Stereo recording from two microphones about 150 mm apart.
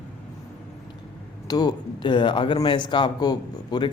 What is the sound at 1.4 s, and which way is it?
Speech, 25° left (ahead or behind).